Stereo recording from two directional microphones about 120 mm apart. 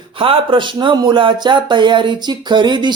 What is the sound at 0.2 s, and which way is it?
Speech, 45° right (ahead or behind).